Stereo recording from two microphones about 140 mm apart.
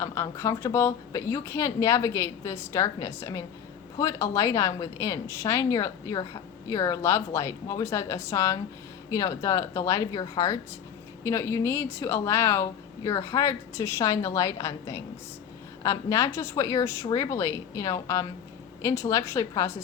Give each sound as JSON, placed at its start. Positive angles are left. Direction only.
{"t": 0.0, "sound": "a woman's voice", "side_deg": 20}